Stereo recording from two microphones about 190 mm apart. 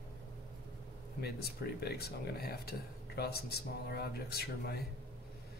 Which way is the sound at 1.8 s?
55° left (ahead or behind).